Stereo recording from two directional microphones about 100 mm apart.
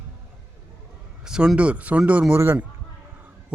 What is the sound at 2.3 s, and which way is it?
Speech, 25° right (ahead or behind).